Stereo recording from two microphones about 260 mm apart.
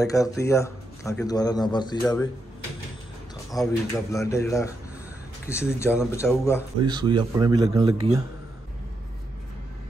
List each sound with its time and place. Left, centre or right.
0.0 s a man's voice: centre
3.5 s a man's voice: centre
6.8 s speech: centre